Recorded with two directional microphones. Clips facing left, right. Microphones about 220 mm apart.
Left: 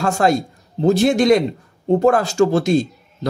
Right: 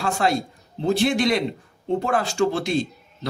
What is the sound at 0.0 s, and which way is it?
Speech, 45° left (ahead or behind).